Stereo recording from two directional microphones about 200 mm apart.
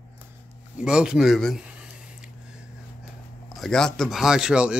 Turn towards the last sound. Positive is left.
turn(degrees=-5)  # may be behind; listen again after turning